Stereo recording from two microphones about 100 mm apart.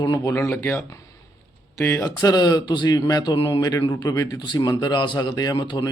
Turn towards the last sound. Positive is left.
turn(degrees=50)  # may be behind; listen again after turning